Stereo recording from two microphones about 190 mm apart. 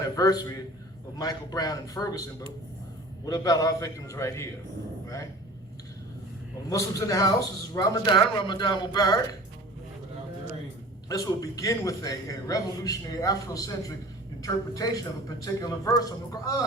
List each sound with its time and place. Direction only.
0.0 s a man's voice: 20° left (ahead or behind)
3.2 s a man's voice: 20° left (ahead or behind)
6.7 s a man's voice: 15° left (ahead or behind)
11.1 s a man's voice: 20° left (ahead or behind)